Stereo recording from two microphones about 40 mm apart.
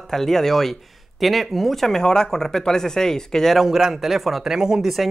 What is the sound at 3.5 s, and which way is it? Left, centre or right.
A man's voice, centre.